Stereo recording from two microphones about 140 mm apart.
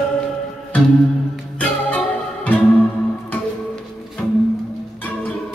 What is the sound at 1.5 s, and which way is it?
Music, 10° left (ahead or behind).